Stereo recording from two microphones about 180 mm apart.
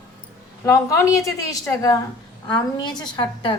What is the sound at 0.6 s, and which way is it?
A woman's voice, 15° left (ahead or behind).